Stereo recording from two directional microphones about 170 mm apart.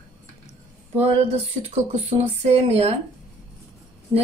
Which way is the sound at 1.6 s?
40° right (ahead or behind).